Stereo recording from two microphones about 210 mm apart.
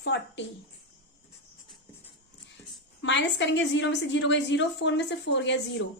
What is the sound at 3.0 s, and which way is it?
A woman's voice, 60° left (ahead or behind).